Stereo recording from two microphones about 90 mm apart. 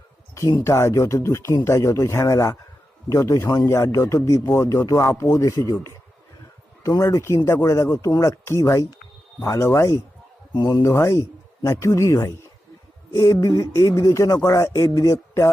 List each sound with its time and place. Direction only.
0.6 s speech: 30° left (ahead or behind)
6.8 s speech: 40° left (ahead or behind)
10.5 s speech: 45° left (ahead or behind)
10.8 s speech: 30° left (ahead or behind)